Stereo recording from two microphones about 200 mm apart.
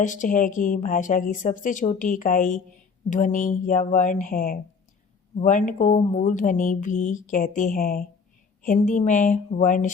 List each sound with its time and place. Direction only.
0.0 s speech: 40° left (ahead or behind)